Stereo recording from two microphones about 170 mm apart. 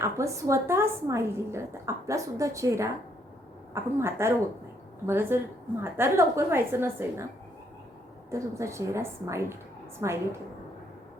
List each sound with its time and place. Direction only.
0.0 s a woman's voice: 15° right (ahead or behind)
8.3 s a woman's voice: 15° right (ahead or behind)